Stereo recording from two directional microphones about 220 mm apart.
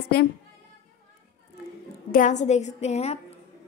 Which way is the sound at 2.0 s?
35° left (ahead or behind).